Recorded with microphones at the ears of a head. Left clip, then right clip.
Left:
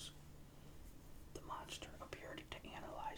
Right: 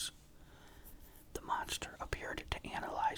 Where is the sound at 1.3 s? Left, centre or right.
Right.